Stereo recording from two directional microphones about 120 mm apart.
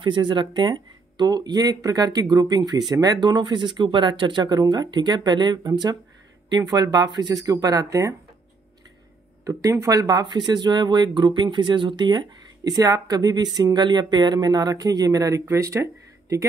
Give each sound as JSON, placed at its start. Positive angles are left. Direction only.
{"t": 0.0, "sound": "speech", "side_deg": -40}
{"t": 9.4, "sound": "speech", "side_deg": -30}